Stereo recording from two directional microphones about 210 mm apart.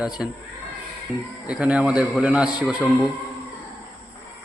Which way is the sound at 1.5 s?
5° right (ahead or behind).